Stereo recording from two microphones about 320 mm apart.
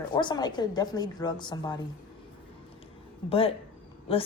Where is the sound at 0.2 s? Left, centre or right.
Centre.